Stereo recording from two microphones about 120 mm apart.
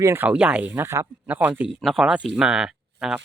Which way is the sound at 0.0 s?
20° right (ahead or behind).